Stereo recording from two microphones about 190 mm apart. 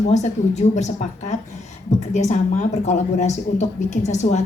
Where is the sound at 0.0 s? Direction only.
40° left (ahead or behind).